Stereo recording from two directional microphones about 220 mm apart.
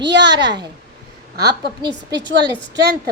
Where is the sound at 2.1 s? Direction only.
50° right (ahead or behind).